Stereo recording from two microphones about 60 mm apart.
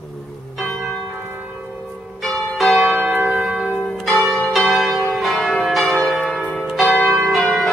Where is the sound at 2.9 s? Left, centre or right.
Right.